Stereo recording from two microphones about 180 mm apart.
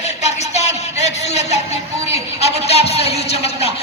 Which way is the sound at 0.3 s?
40° left (ahead or behind).